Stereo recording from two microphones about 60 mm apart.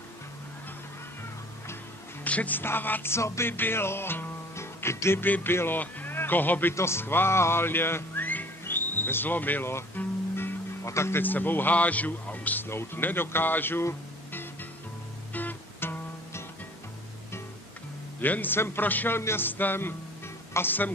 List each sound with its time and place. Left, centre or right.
2.2 s speech: left
2.6 s music: left
5.2 s a man's voice: left
6.7 s music: left
10.8 s speech: left
11.2 s a man's voice: left
12.6 s a man's voice: left
14.3 s music: left
18.2 s a man's voice: left